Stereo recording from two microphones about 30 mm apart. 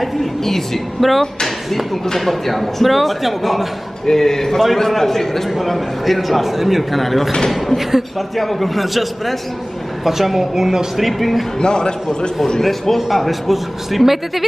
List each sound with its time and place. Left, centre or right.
0.4 s a woman's voice: centre
4.1 s a man's voice: centre
5.6 s a man's voice: centre
8.4 s a man's voice: centre
11.0 s a man's voice: centre
11.5 s speech: left
12.6 s a man's voice: centre